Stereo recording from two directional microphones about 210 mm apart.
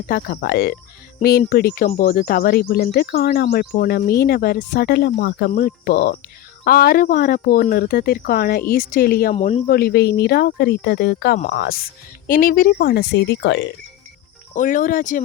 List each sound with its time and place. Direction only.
0.1 s speech: 45° left (ahead or behind)
9.3 s speech: 30° left (ahead or behind)
9.6 s speech: 45° left (ahead or behind)
11.3 s speech: 40° left (ahead or behind); by 13.7 s 60° left (ahead or behind)
14.5 s speech: 40° left (ahead or behind)